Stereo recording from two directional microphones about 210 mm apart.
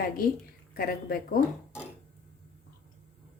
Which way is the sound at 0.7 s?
45° left (ahead or behind).